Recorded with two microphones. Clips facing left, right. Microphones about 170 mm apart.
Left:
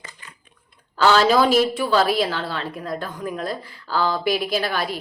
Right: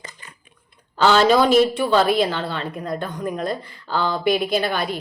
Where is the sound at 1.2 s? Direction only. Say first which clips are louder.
Right 2 dB; 5° left (ahead or behind).